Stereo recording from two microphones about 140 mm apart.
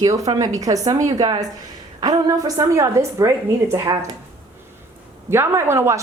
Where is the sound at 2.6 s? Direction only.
25° right (ahead or behind).